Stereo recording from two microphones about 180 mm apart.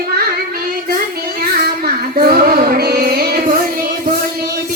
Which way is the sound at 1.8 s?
60° right (ahead or behind).